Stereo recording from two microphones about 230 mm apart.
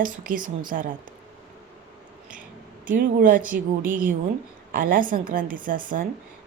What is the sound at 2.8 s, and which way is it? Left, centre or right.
A woman's voice, right.